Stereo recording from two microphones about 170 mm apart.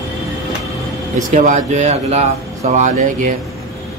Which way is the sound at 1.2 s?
50° right (ahead or behind).